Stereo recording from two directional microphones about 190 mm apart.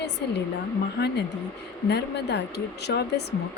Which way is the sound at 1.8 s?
65° left (ahead or behind).